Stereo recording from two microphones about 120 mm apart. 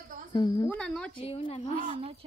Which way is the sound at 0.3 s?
40° left (ahead or behind).